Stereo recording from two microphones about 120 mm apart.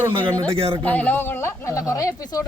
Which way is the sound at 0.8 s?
15° left (ahead or behind).